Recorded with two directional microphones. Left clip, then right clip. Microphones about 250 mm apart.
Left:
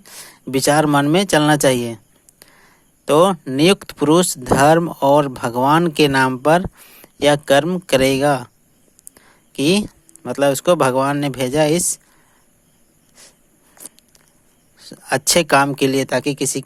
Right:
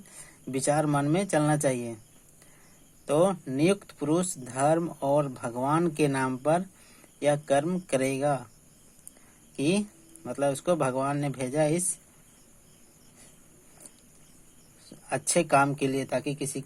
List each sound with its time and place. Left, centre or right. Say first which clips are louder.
0.0 s speech: left 10 dB; left
3.1 s speech: left 11 dB; left
9.6 s speech: left 11 dB; left
14.8 s speech: left 13 dB; left